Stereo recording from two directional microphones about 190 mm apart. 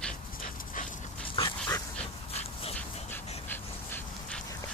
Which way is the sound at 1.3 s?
20° left (ahead or behind).